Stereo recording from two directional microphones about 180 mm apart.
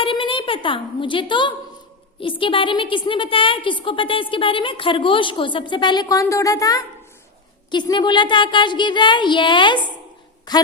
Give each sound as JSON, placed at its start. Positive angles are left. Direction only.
{"t": 0.0, "sound": "a woman's voice", "side_deg": 30}